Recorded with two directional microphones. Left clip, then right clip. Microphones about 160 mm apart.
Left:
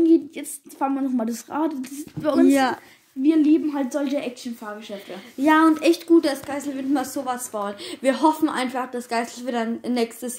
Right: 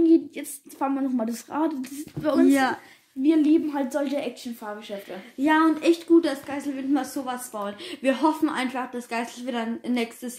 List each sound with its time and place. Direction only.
0.0 s a woman's voice: 20° left (ahead or behind)
3.2 s a woman's voice: 5° right (ahead or behind)
5.4 s a woman's voice: 50° left (ahead or behind); by 10.3 s 25° left (ahead or behind)